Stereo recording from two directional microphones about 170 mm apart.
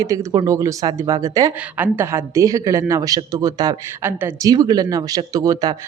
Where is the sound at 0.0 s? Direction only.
20° right (ahead or behind).